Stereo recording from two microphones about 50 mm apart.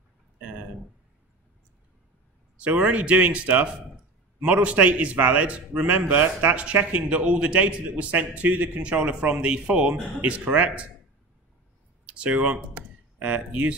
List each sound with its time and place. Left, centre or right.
2.6 s a man's voice: right
12.1 s speech: right